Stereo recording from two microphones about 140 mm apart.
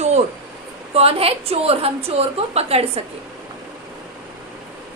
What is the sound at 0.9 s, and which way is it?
A woman's voice, 45° right (ahead or behind).